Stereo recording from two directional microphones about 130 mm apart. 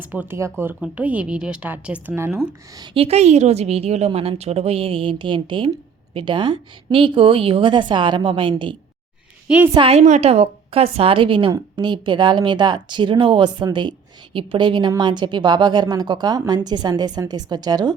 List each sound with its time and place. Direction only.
0.0 s speech: 10° right (ahead or behind)
2.9 s a woman's voice: 50° right (ahead or behind)
9.9 s a woman's voice: 55° right (ahead or behind); by 17.9 s 30° right (ahead or behind)